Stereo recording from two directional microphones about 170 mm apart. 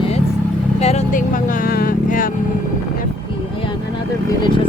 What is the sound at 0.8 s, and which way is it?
Speech, 40° left (ahead or behind).